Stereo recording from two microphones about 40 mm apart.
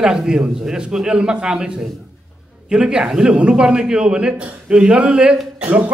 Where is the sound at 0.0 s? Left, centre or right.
Centre.